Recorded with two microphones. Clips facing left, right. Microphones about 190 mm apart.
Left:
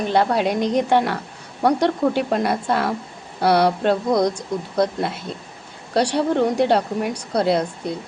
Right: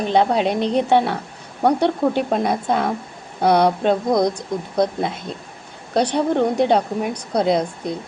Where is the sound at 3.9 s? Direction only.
10° right (ahead or behind).